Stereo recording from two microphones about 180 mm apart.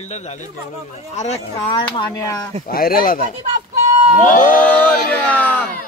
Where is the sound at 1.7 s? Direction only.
25° left (ahead or behind).